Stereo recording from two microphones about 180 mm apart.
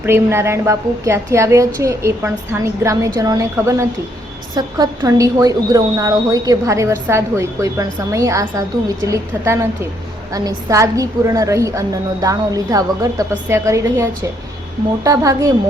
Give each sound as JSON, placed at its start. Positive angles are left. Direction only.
{"t": 0.0, "sound": "a woman's voice", "side_deg": -15}